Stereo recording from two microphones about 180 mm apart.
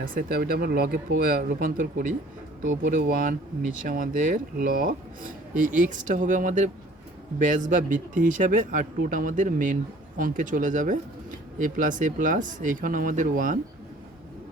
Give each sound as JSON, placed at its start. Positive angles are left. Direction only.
{"t": 0.0, "sound": "speech", "side_deg": -55}